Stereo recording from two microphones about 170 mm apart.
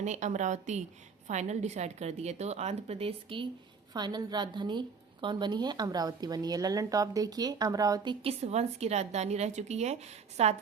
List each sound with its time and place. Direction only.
0.0 s a woman's voice: 45° right (ahead or behind); by 8.1 s 20° right (ahead or behind)
8.2 s a woman's voice: 40° right (ahead or behind)